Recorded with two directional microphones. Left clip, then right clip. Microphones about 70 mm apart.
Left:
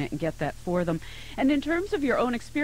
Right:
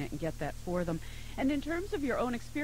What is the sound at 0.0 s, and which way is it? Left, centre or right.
Speech, left.